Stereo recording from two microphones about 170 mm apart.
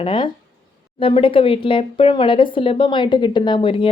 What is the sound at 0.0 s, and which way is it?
Speech, 30° left (ahead or behind).